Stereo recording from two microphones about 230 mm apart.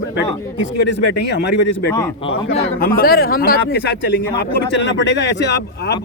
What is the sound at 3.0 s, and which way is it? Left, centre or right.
Speech, left.